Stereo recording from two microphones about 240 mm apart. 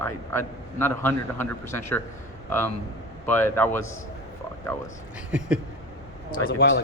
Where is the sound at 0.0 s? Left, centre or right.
Centre.